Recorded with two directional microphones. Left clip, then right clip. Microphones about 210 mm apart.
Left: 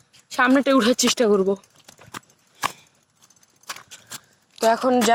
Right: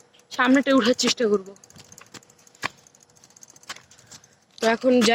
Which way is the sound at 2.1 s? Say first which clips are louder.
Left 7 dB; 20° left (ahead or behind).